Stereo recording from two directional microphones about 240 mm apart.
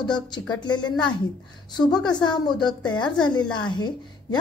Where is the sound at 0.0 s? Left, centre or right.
Centre.